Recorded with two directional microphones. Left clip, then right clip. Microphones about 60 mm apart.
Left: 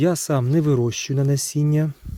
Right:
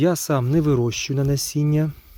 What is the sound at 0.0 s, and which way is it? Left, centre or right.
Speech, left.